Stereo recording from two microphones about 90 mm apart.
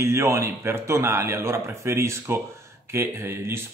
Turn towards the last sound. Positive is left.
turn(degrees=-30)  # may be behind; listen again after turning